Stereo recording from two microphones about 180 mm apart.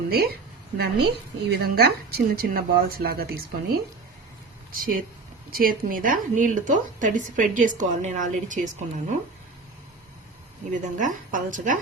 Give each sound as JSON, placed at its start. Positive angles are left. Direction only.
{"t": 0.1, "sound": "a woman's voice", "side_deg": -60}
{"t": 1.5, "sound": "a woman's voice", "side_deg": -60}
{"t": 10.7, "sound": "speech", "side_deg": -45}